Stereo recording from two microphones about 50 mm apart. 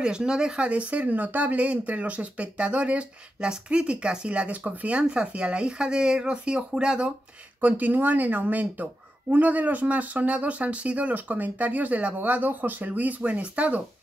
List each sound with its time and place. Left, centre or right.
0.0 s speech: centre
0.7 s speech: right
7.6 s speech: right